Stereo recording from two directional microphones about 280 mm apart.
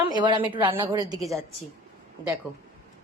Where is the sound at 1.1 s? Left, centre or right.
Centre.